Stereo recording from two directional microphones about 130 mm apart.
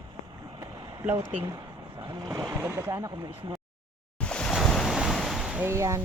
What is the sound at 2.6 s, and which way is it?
Speech, 20° right (ahead or behind).